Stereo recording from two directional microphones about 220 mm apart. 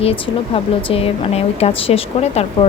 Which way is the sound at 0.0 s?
25° left (ahead or behind).